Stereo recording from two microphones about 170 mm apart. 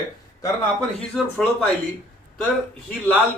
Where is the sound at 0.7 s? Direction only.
5° left (ahead or behind).